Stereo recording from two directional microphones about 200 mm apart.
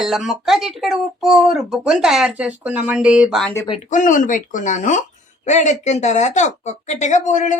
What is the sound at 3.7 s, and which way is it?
Speech, 40° left (ahead or behind).